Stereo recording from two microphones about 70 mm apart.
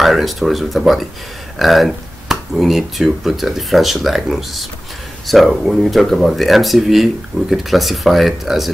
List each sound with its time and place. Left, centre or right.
0.0 s speech: centre